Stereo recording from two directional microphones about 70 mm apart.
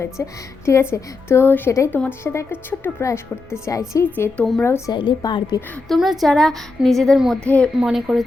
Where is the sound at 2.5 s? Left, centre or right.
Left.